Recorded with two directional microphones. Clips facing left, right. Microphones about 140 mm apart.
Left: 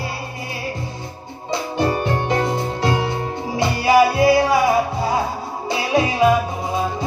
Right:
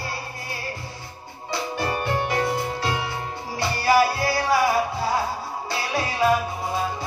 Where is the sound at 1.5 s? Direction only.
20° left (ahead or behind).